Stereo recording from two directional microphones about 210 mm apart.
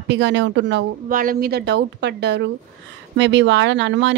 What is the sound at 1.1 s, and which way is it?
Speech, 40° right (ahead or behind).